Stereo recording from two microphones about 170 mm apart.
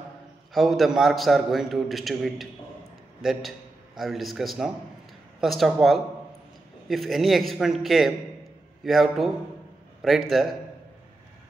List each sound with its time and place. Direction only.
0.5 s a man's voice: centre (ahead or behind)